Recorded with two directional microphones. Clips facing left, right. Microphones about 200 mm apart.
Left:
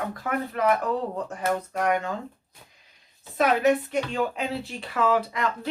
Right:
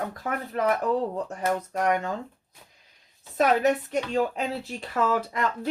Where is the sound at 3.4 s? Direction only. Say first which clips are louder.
Left 1 dB; 40° right (ahead or behind).